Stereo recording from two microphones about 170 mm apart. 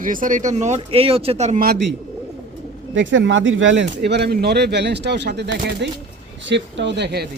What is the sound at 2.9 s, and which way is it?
Speech, 90° right.